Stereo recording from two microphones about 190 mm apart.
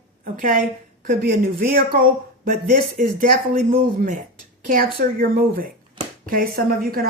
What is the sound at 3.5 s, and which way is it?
Speech, 45° right (ahead or behind).